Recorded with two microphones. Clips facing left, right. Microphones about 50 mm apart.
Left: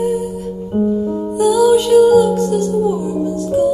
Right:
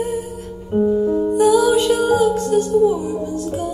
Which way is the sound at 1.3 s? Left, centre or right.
Right.